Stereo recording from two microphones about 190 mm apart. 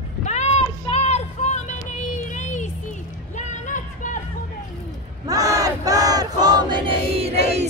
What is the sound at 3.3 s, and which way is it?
Music, 40° left (ahead or behind).